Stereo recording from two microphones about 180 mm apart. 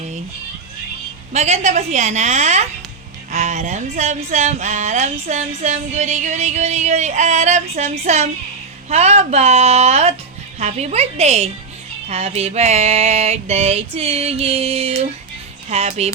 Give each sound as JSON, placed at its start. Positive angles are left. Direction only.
{"t": 1.3, "sound": "speech", "side_deg": -40}